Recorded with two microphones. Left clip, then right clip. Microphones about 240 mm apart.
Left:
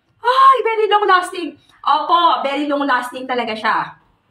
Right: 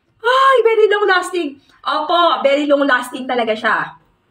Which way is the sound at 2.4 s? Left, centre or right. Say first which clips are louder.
Right 5 dB; centre.